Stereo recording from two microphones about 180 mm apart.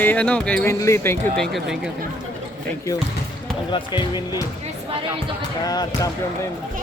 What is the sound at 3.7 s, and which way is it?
Speech, 25° left (ahead or behind).